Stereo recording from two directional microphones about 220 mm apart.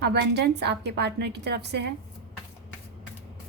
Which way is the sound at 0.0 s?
50° right (ahead or behind).